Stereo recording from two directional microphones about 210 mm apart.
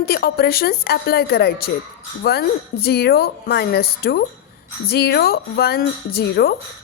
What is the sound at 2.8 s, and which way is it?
A woman's voice, 50° left (ahead or behind).